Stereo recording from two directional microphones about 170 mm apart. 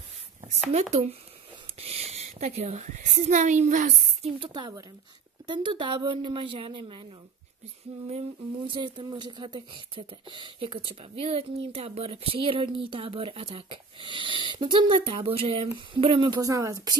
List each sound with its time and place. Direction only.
0.7 s a woman's voice: 40° right (ahead or behind)
4.4 s a woman's voice: 25° right (ahead or behind)
8.6 s speech: 30° right (ahead or behind)